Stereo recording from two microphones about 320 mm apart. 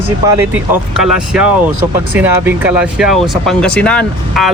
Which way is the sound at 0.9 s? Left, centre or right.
Centre.